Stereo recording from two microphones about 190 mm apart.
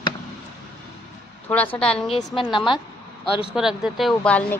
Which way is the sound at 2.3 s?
25° left (ahead or behind).